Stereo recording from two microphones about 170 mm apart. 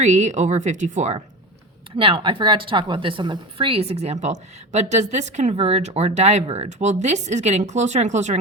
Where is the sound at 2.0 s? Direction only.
30° right (ahead or behind).